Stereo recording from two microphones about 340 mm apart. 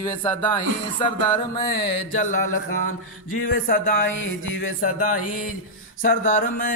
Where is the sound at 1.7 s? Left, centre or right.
Left.